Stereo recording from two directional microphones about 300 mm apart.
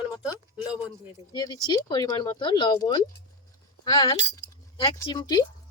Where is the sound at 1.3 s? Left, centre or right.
Centre.